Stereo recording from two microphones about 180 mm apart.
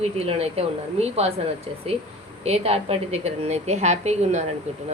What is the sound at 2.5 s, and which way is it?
A woman's voice, 35° right (ahead or behind).